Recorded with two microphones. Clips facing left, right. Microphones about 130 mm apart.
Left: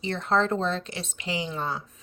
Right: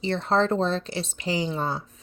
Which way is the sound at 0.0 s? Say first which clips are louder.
Right 2 dB; 30° right (ahead or behind).